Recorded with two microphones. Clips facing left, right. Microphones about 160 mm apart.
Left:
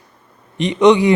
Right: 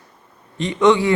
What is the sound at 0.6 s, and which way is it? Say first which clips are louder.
Speech: left 4 dB; 20° left (ahead or behind).